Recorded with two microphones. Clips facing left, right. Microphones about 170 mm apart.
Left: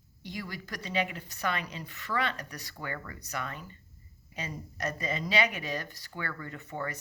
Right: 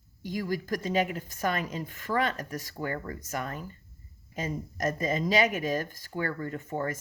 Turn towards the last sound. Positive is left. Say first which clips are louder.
# right 5 dB
turn(degrees=-45)  # may be behind; listen again after turning